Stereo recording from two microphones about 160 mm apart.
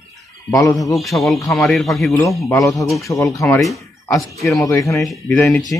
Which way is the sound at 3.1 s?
20° left (ahead or behind).